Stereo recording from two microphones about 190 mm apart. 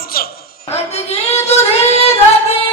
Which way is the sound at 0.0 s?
50° left (ahead or behind).